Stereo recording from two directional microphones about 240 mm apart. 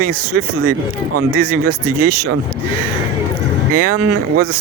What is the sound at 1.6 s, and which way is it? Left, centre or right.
Speech, right.